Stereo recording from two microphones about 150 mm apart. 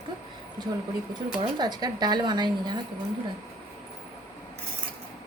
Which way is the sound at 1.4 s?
30° right (ahead or behind).